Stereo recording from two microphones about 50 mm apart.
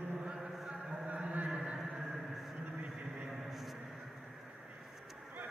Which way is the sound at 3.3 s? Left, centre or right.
Centre.